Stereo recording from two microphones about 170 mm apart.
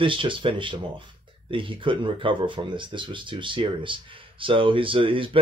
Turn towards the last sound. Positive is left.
turn(degrees=-30)  # may be behind; listen again after turning